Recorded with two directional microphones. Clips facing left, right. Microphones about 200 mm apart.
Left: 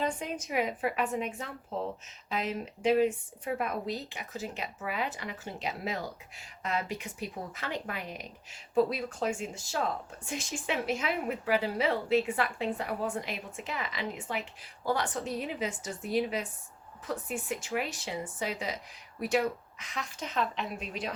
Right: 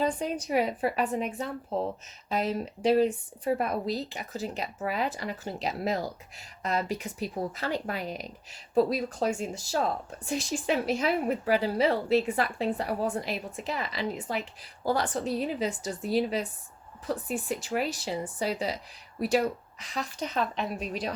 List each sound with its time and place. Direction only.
0.0 s a woman's voice: 35° right (ahead or behind)